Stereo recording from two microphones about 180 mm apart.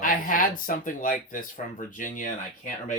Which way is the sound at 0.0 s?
50° left (ahead or behind).